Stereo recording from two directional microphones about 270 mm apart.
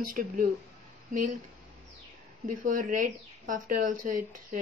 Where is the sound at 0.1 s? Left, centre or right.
Right.